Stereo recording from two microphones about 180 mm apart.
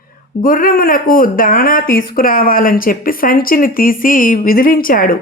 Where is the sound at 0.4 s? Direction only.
50° left (ahead or behind).